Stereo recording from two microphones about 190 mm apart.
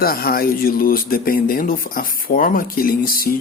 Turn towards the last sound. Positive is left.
turn(degrees=50)  # may be behind; listen again after turning